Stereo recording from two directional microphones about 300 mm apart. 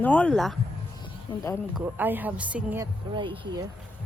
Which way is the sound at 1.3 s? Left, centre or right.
Centre.